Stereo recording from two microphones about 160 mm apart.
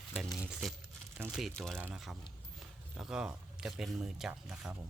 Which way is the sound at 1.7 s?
10° right (ahead or behind).